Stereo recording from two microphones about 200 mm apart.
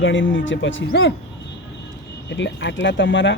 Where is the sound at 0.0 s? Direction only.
70° left (ahead or behind).